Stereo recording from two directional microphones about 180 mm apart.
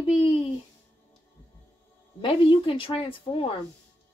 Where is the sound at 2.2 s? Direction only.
30° left (ahead or behind).